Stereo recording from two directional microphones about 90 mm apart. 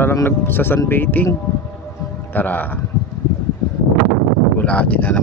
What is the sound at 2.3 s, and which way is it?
Speech, 20° left (ahead or behind).